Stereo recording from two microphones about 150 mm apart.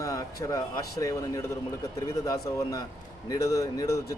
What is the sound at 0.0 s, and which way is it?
A man's voice, 20° left (ahead or behind).